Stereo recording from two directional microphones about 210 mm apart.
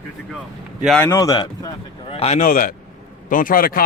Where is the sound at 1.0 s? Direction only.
15° left (ahead or behind).